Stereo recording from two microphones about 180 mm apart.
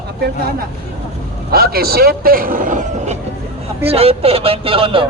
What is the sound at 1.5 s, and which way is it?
Speech, 60° right (ahead or behind).